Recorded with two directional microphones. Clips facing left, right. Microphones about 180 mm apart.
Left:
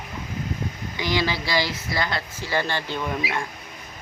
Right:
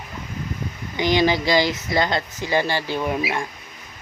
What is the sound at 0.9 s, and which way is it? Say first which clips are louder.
Speech: right 7 dB; 20° right (ahead or behind).